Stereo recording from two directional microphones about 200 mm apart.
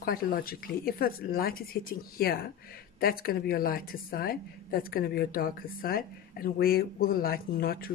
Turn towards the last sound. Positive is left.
turn(degrees=50)  # may be behind; listen again after turning